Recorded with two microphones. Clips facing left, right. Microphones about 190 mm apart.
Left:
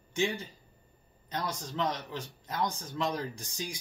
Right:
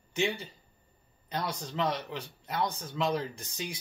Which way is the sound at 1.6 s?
5° right (ahead or behind).